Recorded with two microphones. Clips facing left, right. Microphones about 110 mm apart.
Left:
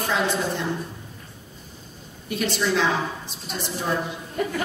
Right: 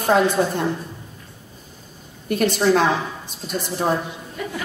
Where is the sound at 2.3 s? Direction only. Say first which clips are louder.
Right 6 dB; 50° right (ahead or behind).